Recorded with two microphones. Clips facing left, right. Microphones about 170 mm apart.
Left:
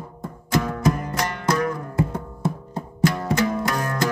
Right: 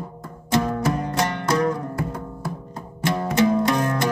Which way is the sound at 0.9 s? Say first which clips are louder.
Right 3 dB; 25° right (ahead or behind).